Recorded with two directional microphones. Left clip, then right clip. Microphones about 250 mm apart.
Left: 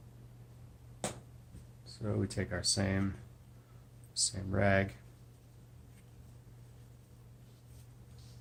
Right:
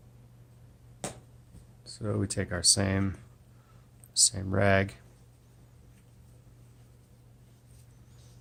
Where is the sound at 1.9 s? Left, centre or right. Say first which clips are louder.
Right 5 dB; right.